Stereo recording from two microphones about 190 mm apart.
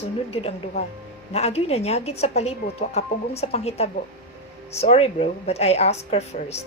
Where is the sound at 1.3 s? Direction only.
35° left (ahead or behind).